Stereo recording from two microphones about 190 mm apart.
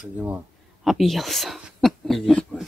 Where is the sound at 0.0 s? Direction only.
5° right (ahead or behind).